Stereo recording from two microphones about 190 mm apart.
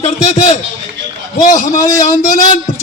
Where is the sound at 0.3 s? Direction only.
40° left (ahead or behind).